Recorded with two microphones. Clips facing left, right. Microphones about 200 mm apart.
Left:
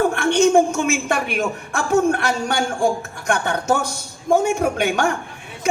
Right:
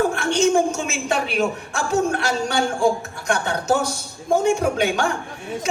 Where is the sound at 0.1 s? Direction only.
55° left (ahead or behind).